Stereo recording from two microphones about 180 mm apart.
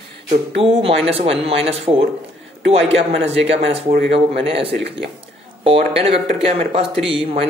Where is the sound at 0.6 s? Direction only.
30° right (ahead or behind).